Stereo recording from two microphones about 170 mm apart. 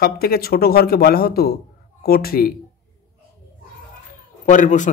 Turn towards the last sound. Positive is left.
turn(degrees=45)  # may be behind; listen again after turning